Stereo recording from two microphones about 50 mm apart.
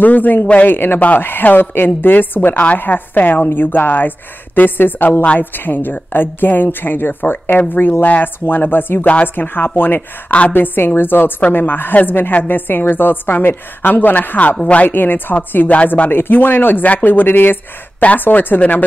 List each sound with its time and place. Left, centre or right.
0.0 s a woman's voice: left
9.0 s speech: left
9.3 s a woman's voice: left
15.0 s a woman's voice: left
15.7 s speech: left
16.1 s a woman's voice: left